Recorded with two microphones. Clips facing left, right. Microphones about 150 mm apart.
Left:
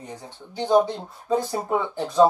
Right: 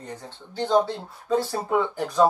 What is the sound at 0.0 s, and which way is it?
Speech, 15° left (ahead or behind).